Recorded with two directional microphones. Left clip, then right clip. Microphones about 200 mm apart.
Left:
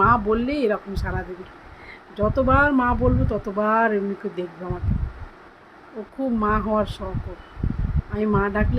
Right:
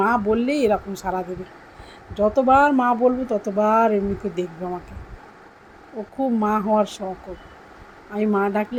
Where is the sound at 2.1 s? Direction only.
5° right (ahead or behind).